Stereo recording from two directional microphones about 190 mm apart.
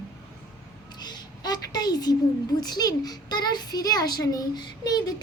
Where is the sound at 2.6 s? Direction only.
20° left (ahead or behind).